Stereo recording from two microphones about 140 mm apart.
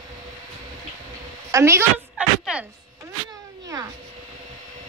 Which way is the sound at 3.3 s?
25° right (ahead or behind).